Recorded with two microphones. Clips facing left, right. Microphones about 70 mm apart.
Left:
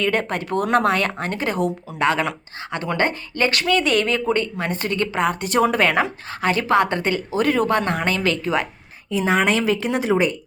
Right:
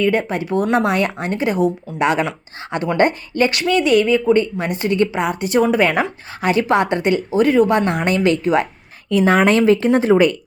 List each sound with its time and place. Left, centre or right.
0.0 s a woman's voice: centre
3.8 s speech: centre
6.4 s a woman's voice: centre
7.3 s speech: centre
7.7 s a woman's voice: centre
9.0 s a woman's voice: right
9.5 s speech: right